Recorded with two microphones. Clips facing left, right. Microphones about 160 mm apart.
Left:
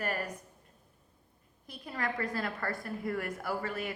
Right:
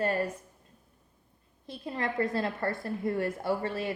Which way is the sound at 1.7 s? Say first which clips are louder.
Right 3 dB; 25° right (ahead or behind).